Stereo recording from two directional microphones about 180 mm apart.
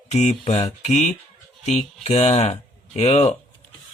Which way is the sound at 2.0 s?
40° left (ahead or behind).